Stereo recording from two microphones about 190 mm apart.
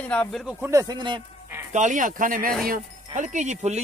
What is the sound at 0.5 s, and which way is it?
Speech, 10° right (ahead or behind).